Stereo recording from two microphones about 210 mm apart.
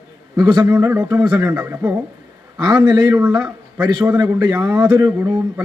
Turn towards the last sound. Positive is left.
turn(degrees=-10)  # may be behind; listen again after turning